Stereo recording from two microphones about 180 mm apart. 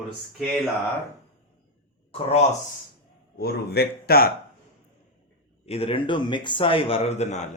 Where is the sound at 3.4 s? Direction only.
60° left (ahead or behind).